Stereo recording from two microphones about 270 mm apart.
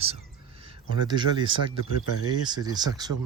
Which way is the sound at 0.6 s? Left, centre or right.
Centre.